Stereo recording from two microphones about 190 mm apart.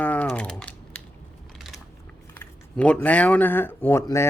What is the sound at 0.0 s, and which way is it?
Typing, 5° left (ahead or behind).